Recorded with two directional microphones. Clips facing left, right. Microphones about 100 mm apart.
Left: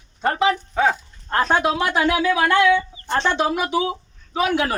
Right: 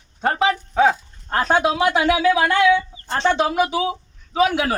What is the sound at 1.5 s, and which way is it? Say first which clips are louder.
Speech: right 4 dB; 20° right (ahead or behind).